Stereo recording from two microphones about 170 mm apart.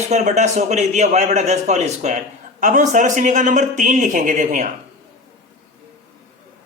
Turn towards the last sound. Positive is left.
turn(degrees=-50)  # may be behind; listen again after turning